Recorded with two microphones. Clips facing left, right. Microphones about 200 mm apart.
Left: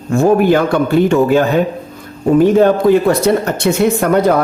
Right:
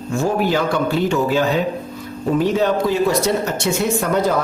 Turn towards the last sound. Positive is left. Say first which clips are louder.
# left 6 dB
turn(degrees=60)  # may be behind; listen again after turning